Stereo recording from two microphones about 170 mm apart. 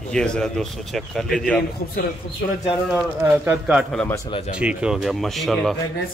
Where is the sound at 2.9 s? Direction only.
15° right (ahead or behind).